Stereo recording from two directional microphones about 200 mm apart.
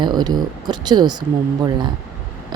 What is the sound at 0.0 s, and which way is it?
Speech, 20° right (ahead or behind).